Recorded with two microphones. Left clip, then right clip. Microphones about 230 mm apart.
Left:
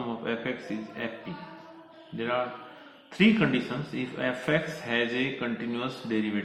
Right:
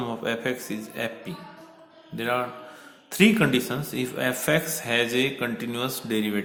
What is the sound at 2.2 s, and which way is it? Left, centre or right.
Speech, right.